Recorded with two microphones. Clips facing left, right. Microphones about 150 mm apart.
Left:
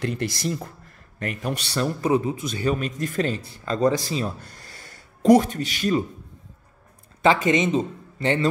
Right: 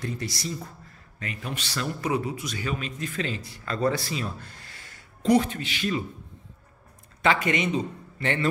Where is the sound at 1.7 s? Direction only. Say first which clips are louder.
Left 6 dB; 30° left (ahead or behind).